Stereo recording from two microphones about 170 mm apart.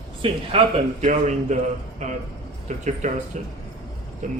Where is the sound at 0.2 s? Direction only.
30° right (ahead or behind).